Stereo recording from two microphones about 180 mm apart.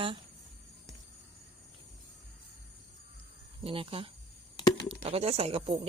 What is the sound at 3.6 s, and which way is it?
Speech, 30° right (ahead or behind).